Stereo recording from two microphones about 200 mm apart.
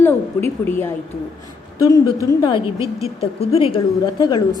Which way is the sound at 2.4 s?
25° left (ahead or behind).